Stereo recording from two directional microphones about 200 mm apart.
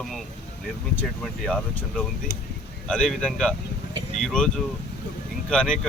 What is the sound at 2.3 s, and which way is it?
Speech, 50° left (ahead or behind).